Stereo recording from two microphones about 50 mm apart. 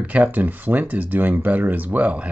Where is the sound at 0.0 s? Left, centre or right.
Right.